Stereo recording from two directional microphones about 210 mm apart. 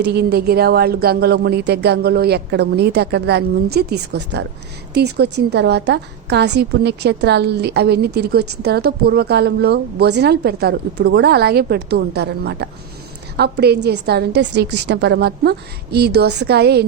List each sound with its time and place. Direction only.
0.0 s a woman's voice: 50° right (ahead or behind)